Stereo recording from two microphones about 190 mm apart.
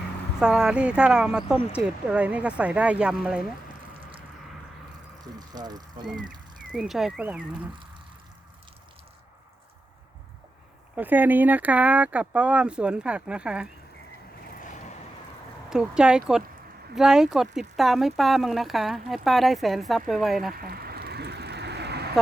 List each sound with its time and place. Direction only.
0.3 s speech: 5° right (ahead or behind)
5.2 s speech: 20° right (ahead or behind)
6.7 s speech: centre (ahead or behind)
10.9 s speech: 10° right (ahead or behind)
14.6 s vehicle: 40° left (ahead or behind)
15.7 s speech: 5° right (ahead or behind)
20.5 s a sound: 50° right (ahead or behind)